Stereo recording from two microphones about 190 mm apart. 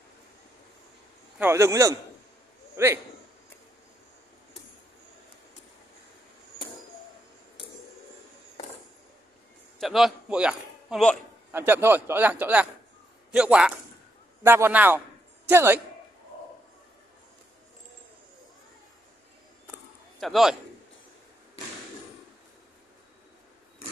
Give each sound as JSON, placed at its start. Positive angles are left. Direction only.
{"t": 1.4, "sound": "a man's voice", "side_deg": -15}
{"t": 9.8, "sound": "a man's voice", "side_deg": 0}
{"t": 11.5, "sound": "a man's voice", "side_deg": -10}
{"t": 20.2, "sound": "a man's voice", "side_deg": 0}